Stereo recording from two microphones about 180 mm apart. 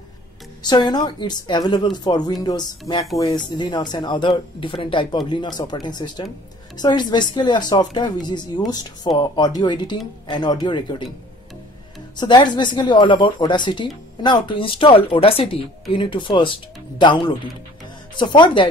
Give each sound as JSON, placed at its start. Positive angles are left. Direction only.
{"t": 0.7, "sound": "speech", "side_deg": 25}
{"t": 12.2, "sound": "speech", "side_deg": 25}